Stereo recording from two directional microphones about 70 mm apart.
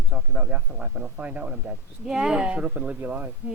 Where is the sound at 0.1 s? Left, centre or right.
Centre.